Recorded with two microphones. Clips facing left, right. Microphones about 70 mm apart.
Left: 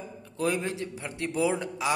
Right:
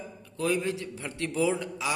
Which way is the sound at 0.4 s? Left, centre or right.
Left.